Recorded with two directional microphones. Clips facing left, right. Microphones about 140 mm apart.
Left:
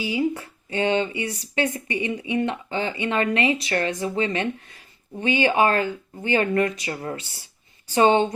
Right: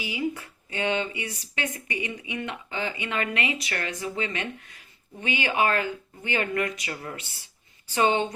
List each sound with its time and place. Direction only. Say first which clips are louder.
0.0 s speech: left 6 dB; 30° left (ahead or behind)